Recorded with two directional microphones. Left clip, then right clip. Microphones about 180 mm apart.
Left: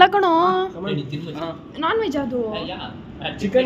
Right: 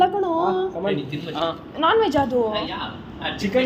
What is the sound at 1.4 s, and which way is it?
Speech, 35° left (ahead or behind).